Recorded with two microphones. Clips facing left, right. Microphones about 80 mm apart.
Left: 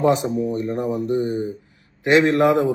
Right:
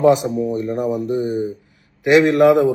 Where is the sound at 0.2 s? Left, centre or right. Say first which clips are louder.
Right 2 dB; centre.